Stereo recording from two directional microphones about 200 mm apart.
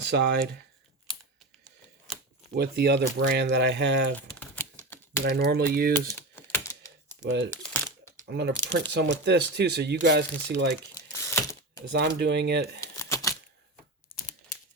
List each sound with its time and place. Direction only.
0.0 s speech: 60° right (ahead or behind)
2.1 s shuffling cards: centre (ahead or behind)
2.6 s speech: 50° right (ahead or behind)
4.1 s typing: 10° left (ahead or behind)
5.2 s speech: 55° right (ahead or behind)
5.9 s typing: 10° left (ahead or behind)
7.2 s speech: 60° right (ahead or behind)
7.5 s crumpling: 10° left (ahead or behind)
8.3 s speech: 55° right (ahead or behind)
10.9 s a sound: 15° left (ahead or behind)
11.9 s speech: 55° right (ahead or behind)
12.8 s typewriter: 15° left (ahead or behind)
14.1 s a sound: 25° left (ahead or behind)